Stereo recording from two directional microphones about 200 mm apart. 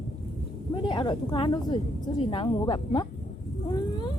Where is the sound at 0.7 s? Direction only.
25° left (ahead or behind).